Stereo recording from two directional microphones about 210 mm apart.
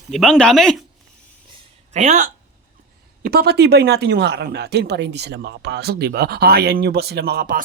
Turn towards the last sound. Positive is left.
turn(degrees=-50)  # may be behind; listen again after turning